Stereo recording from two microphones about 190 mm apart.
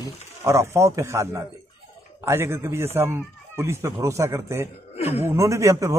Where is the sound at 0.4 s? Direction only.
15° right (ahead or behind).